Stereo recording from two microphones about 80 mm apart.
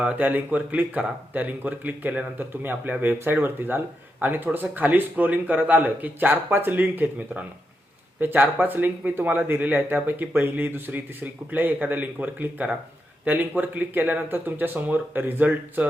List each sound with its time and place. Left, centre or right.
0.0 s speech: centre